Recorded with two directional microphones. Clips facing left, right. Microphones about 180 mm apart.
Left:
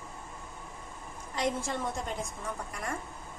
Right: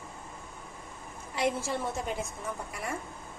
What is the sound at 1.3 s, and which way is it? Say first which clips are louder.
Speech: right 2 dB; 5° right (ahead or behind).